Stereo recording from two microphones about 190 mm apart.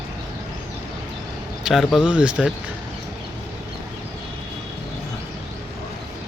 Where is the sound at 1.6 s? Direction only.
Centre (ahead or behind).